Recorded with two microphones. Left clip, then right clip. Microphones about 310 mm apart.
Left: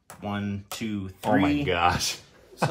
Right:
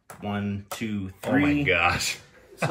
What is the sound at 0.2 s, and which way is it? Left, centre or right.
Speech, left.